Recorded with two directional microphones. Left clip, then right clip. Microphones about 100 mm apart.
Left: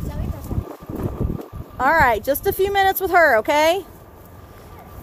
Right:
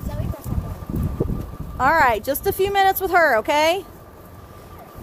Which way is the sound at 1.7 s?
25° left (ahead or behind).